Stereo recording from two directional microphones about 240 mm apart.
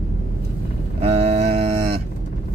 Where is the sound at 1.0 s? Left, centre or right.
Right.